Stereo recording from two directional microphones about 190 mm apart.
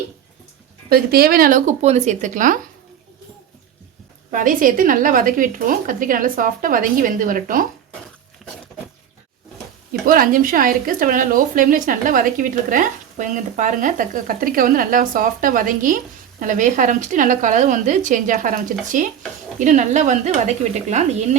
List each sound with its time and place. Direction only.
0.9 s a woman's voice: 50° right (ahead or behind)
4.3 s a woman's voice: 45° right (ahead or behind)
10.1 s a woman's voice: 45° right (ahead or behind)